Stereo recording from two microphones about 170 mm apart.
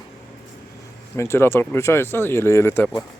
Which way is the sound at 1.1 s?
15° left (ahead or behind).